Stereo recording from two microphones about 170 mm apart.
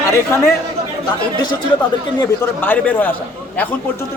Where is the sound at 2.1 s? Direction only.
10° left (ahead or behind).